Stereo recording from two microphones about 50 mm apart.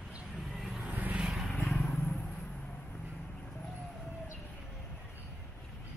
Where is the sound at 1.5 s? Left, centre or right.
Left.